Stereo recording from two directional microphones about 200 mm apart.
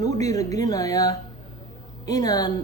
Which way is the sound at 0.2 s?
15° left (ahead or behind).